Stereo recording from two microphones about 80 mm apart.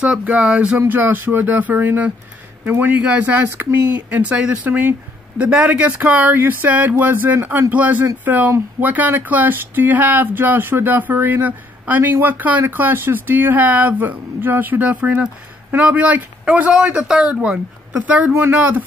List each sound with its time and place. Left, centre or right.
0.0 s speech: centre
0.7 s speech: right
5.4 s speech: centre
5.7 s speech: right